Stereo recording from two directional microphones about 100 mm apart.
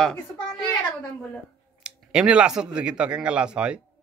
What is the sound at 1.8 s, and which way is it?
Speech, 10° right (ahead or behind).